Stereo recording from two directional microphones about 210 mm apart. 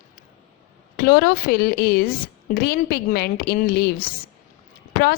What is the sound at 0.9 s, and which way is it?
A woman's voice, 45° left (ahead or behind).